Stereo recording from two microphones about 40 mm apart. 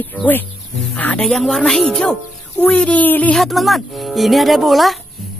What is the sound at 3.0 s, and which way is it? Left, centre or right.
Speech, left.